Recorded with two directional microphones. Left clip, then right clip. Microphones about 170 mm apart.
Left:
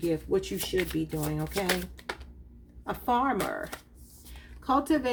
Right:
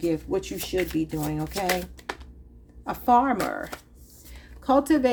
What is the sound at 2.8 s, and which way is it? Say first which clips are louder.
Speech: right 6 dB; 45° right (ahead or behind).